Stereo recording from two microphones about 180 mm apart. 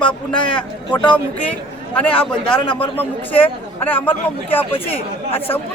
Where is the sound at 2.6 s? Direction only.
25° left (ahead or behind).